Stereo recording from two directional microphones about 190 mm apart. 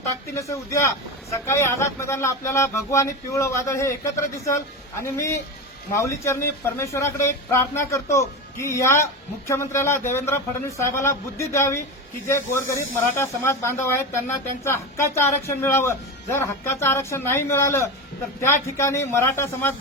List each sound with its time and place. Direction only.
0.3 s speech: 15° left (ahead or behind)